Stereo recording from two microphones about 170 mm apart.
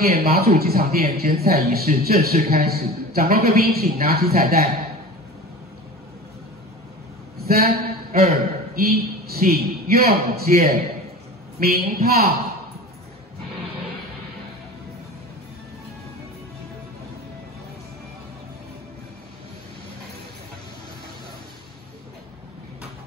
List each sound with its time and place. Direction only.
0.0 s a man's voice: 65° right (ahead or behind)
7.3 s a sound: 65° right (ahead or behind)
8.7 s a man's voice: 65° right (ahead or behind)